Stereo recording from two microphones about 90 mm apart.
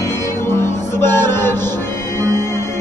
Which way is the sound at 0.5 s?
25° left (ahead or behind).